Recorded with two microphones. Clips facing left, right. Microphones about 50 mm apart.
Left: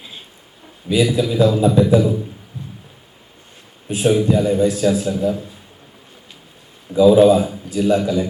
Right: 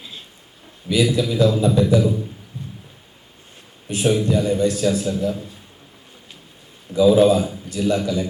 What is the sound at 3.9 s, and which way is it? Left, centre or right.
A man's voice, centre.